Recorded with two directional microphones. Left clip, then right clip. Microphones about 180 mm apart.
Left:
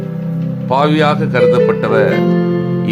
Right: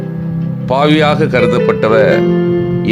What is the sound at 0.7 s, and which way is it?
Speech, 30° right (ahead or behind).